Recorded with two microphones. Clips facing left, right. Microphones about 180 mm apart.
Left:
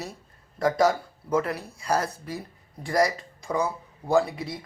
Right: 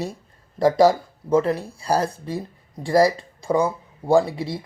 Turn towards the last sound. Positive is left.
turn(degrees=-30)  # may be behind; listen again after turning